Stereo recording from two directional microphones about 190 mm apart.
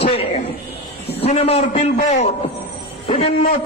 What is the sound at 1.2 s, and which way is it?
A man's voice, 30° left (ahead or behind).